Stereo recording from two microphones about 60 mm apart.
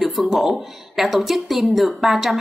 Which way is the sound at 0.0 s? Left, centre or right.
Centre.